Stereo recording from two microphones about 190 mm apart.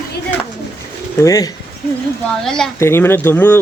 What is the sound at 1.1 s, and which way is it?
Speech, 20° left (ahead or behind).